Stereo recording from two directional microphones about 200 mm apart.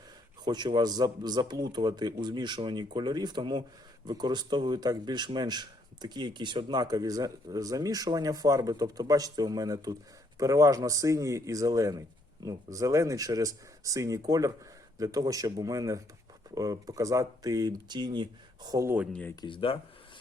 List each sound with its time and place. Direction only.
0.4 s speech: 20° right (ahead or behind)
19.4 s speech: 25° left (ahead or behind)